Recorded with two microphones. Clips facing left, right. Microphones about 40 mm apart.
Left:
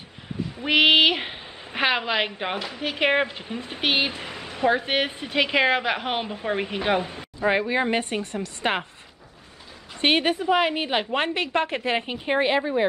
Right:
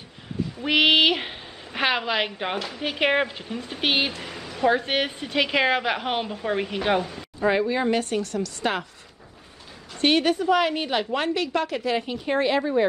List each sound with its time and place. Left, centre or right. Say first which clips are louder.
0.6 s a sound: left 1 dB; centre
1.7 s a woman's voice: left 1 dB; centre
3.8 s speech: even; centre
4.1 s a sound: left 1 dB; centre
4.6 s a woman's voice: even; centre
7.0 s a woman's voice: right 1 dB; left
9.9 s a woman's voice: right 1 dB; left